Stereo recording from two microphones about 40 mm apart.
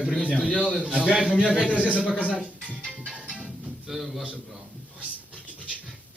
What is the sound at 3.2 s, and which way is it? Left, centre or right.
Music, right.